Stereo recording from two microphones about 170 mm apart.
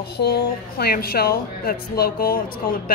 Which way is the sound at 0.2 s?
70° left (ahead or behind).